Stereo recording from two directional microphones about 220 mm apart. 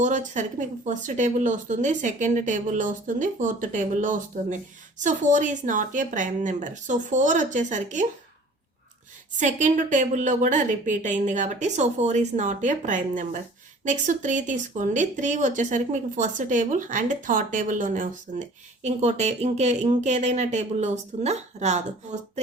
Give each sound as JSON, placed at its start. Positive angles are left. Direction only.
{"t": 0.0, "sound": "speech", "side_deg": -35}
{"t": 9.4, "sound": "speech", "side_deg": -35}